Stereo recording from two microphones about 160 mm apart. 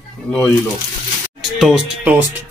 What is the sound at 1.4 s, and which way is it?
Speech, centre (ahead or behind).